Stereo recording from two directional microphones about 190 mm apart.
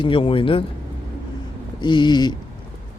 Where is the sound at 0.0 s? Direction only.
30° left (ahead or behind).